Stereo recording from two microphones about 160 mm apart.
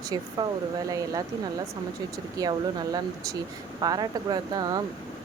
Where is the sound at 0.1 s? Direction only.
25° right (ahead or behind).